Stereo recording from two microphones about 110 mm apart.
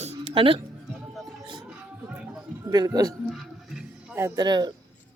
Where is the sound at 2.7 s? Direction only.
35° right (ahead or behind).